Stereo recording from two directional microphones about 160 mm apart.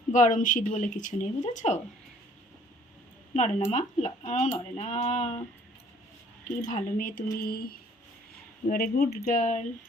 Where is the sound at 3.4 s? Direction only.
40° left (ahead or behind).